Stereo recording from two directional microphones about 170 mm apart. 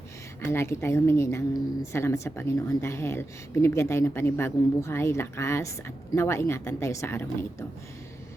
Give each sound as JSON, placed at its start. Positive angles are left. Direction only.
{"t": 0.4, "sound": "a woman's voice", "side_deg": 15}